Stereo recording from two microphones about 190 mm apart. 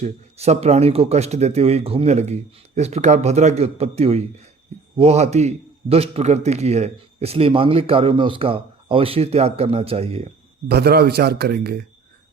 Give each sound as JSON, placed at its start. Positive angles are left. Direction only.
{"t": 0.0, "sound": "a man's voice", "side_deg": -35}
{"t": 10.7, "sound": "a man's voice", "side_deg": -55}